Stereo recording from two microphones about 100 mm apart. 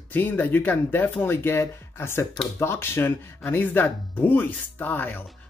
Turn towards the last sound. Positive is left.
turn(degrees=20)  # may be behind; listen again after turning